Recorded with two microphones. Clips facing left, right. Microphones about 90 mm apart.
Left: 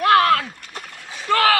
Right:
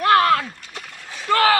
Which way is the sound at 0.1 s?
20° right (ahead or behind).